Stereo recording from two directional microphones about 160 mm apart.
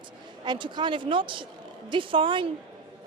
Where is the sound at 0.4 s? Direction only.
30° right (ahead or behind).